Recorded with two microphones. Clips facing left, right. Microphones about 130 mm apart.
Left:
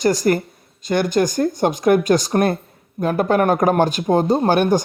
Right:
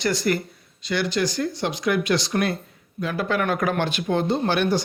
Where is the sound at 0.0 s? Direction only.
45° left (ahead or behind).